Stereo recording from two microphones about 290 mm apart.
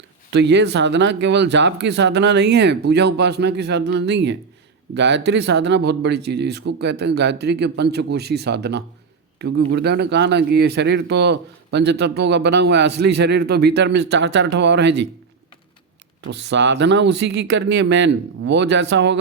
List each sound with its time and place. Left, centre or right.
0.3 s speech: right
16.2 s speech: right